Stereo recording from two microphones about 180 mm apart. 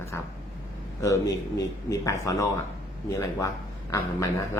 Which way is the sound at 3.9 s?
20° left (ahead or behind).